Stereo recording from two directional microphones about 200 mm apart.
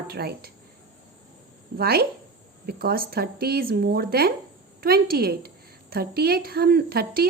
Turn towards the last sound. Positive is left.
turn(degrees=-50)  # may be behind; listen again after turning